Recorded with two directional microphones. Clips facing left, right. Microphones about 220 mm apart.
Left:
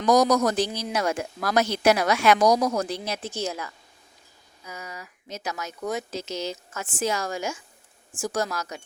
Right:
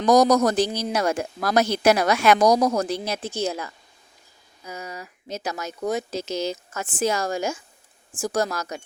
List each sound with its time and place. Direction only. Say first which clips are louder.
0.0 s speech: right 3 dB; 40° right (ahead or behind)
3.3 s speech: right 4 dB; 30° right (ahead or behind)